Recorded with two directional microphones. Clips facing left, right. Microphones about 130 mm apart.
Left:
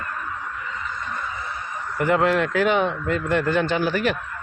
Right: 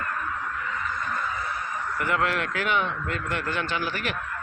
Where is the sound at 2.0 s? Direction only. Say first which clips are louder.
Left 7 dB; 30° left (ahead or behind).